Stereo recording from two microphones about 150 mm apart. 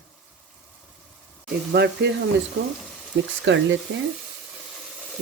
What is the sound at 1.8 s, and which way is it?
Speech, 90° right.